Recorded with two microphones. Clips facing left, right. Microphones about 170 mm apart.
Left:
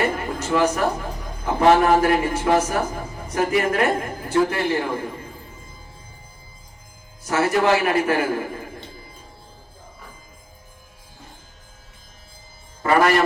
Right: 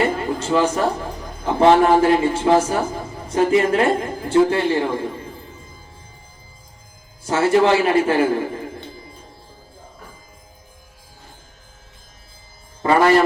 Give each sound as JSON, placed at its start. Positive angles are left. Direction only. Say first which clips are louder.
{"t": 0.2, "sound": "a sound", "louder": "right 2 dB", "side_deg": -30}
{"t": 1.5, "sound": "a man's voice", "louder": "right 2 dB", "side_deg": -30}
{"t": 7.3, "sound": "a man's voice", "louder": "right 3 dB", "side_deg": -25}
{"t": 12.8, "sound": "music", "louder": "right 3 dB", "side_deg": -25}